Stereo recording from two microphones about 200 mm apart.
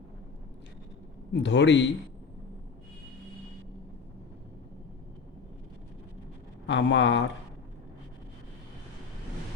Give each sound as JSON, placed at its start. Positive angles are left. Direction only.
{"t": 1.3, "sound": "a man's voice", "side_deg": 65}
{"t": 6.7, "sound": "a man's voice", "side_deg": 65}